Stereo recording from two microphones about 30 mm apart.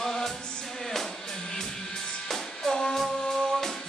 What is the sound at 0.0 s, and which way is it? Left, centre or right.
Music, centre.